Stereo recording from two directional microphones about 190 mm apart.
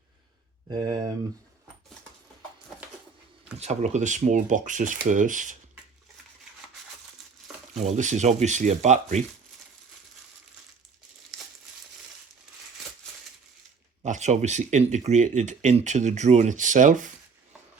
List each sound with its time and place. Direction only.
0.7 s speech: 20° right (ahead or behind)
3.6 s speech: 35° right (ahead or behind)
7.8 s speech: 40° right (ahead or behind)
14.0 s speech: 40° right (ahead or behind)